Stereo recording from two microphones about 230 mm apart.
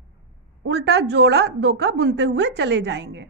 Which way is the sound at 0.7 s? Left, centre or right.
Right.